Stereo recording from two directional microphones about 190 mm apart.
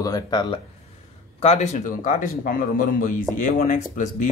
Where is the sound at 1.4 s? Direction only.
35° left (ahead or behind).